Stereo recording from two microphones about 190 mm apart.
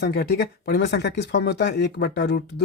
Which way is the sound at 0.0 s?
60° left (ahead or behind).